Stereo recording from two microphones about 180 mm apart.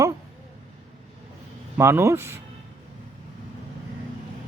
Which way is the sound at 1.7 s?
15° right (ahead or behind).